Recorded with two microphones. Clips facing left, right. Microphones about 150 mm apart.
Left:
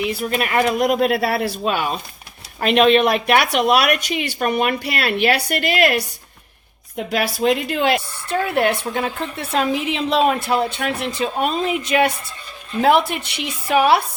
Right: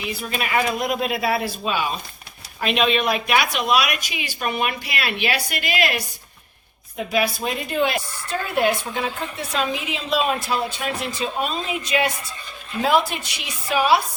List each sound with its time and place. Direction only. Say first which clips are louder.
0.1 s speech: left 4 dB; 60° left (ahead or behind)
7.1 s speech: left 5 dB; 75° left (ahead or behind)